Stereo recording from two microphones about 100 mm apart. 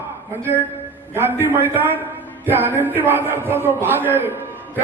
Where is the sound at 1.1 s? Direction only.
20° right (ahead or behind).